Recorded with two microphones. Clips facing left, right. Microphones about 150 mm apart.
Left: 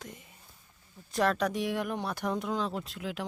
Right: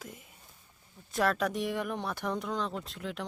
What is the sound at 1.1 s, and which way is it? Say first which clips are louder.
Speech: left 1 dB; centre (ahead or behind).